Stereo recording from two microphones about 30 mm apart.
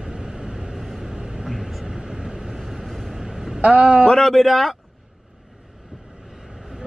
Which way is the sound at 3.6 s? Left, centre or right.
Right.